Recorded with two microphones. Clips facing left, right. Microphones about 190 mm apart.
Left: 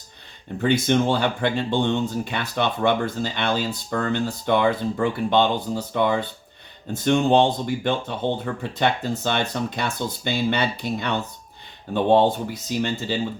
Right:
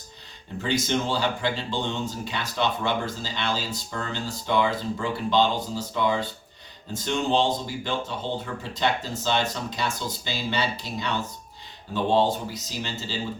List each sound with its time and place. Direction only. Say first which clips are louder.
0.6 s speech: left 6 dB; 55° left (ahead or behind)